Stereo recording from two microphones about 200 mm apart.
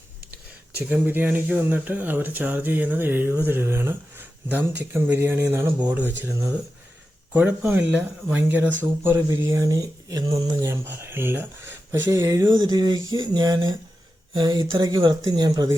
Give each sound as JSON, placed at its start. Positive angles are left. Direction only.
{"t": 0.8, "sound": "speech", "side_deg": -10}